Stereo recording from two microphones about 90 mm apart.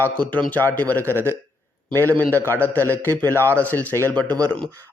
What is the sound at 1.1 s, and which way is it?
A man's voice, 30° right (ahead or behind).